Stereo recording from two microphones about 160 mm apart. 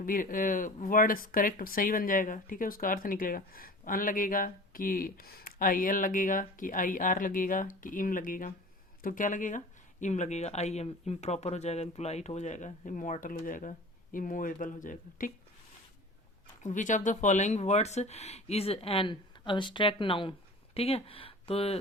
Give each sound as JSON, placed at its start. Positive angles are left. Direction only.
{"t": 0.0, "sound": "speech", "side_deg": 60}
{"t": 16.6, "sound": "speech", "side_deg": 50}